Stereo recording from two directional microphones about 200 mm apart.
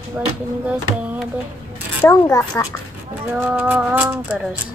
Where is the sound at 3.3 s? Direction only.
10° right (ahead or behind).